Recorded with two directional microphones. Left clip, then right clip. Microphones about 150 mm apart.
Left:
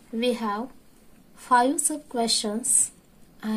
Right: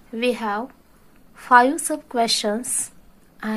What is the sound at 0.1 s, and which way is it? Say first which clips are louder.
A woman's voice: right 4 dB; 5° right (ahead or behind).